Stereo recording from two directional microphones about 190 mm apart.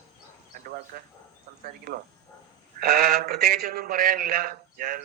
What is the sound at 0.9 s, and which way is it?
A man's voice, 50° right (ahead or behind).